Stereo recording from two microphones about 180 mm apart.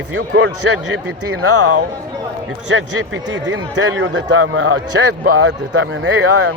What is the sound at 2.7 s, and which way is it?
A man's voice, 90° right.